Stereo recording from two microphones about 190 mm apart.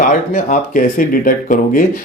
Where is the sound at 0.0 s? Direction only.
45° left (ahead or behind).